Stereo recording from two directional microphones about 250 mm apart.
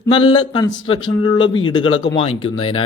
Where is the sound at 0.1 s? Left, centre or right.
Left.